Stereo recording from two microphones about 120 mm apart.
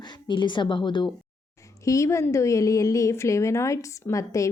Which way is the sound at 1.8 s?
25° left (ahead or behind).